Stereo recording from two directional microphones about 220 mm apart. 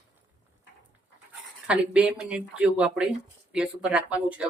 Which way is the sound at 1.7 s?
5° right (ahead or behind).